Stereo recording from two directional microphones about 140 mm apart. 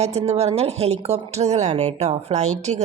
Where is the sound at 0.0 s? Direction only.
50° right (ahead or behind).